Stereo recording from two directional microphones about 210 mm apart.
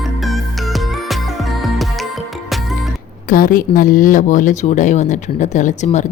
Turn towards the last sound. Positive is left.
turn(degrees=35)  # may be behind; listen again after turning